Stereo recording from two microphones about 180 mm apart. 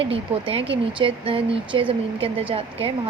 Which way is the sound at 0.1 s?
30° right (ahead or behind).